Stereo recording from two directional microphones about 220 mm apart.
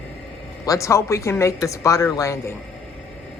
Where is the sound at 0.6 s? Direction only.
15° left (ahead or behind).